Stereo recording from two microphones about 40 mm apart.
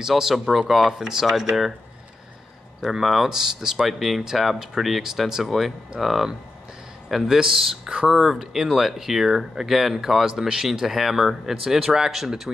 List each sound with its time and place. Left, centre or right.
0.0 s speech: centre
2.8 s speech: centre
7.9 s speech: right
8.2 s speech: centre